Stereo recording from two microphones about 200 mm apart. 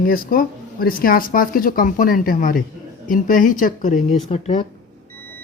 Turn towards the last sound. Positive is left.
turn(degrees=35)  # may be behind; listen again after turning